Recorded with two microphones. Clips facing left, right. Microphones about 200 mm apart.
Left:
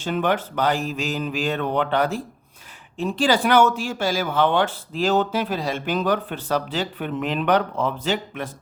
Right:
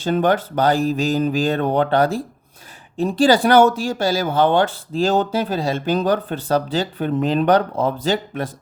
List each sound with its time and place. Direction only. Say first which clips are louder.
0.0 s speech: right 5 dB; 35° right (ahead or behind)